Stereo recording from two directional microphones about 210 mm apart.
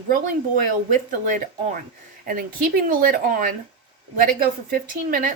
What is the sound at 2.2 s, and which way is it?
Speech, 40° right (ahead or behind).